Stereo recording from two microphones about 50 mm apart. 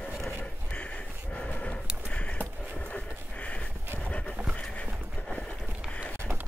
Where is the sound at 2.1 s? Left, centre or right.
Left.